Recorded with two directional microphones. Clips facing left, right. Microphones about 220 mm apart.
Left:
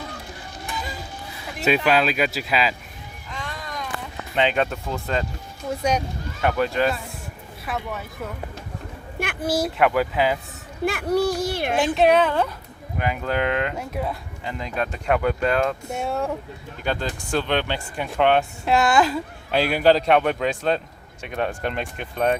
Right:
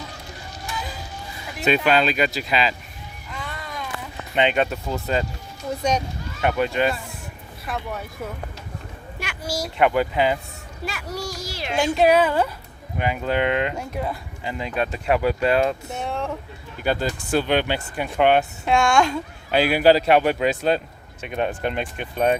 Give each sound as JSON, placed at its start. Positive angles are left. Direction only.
{"t": 1.5, "sound": "speech", "side_deg": 5}
{"t": 3.3, "sound": "a sound", "side_deg": -5}
{"t": 4.4, "sound": "speech", "side_deg": 0}
{"t": 6.4, "sound": "speech", "side_deg": -10}
{"t": 9.1, "sound": "a child's voice", "side_deg": 55}
{"t": 9.7, "sound": "speech", "side_deg": 0}
{"t": 10.8, "sound": "a child's voice", "side_deg": 55}
{"t": 11.9, "sound": "speech", "side_deg": -5}
{"t": 15.9, "sound": "speech", "side_deg": 10}
{"t": 16.8, "sound": "speech", "side_deg": -5}